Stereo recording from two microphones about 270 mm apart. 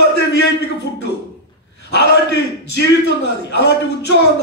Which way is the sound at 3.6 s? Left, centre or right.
Left.